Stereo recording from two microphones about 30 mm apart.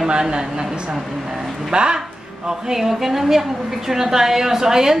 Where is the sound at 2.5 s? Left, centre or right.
Centre.